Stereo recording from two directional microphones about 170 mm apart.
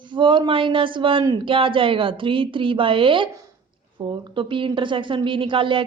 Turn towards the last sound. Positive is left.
turn(degrees=-30)  # may be behind; listen again after turning